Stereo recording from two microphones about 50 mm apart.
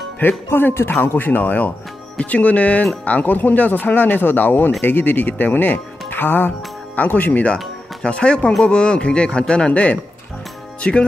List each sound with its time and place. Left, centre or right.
0.5 s speech: left
8.0 s speech: left
10.8 s music: left